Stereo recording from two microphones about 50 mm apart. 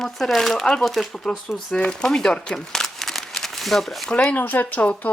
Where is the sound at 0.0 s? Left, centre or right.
Centre.